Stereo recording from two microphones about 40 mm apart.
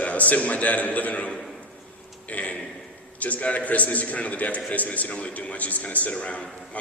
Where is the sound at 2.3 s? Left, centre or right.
Left.